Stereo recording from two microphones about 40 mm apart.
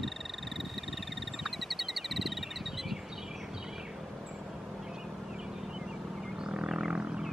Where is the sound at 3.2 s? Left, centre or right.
Centre.